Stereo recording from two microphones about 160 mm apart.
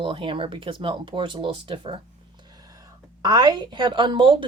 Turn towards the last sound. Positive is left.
turn(degrees=-30)  # may be behind; listen again after turning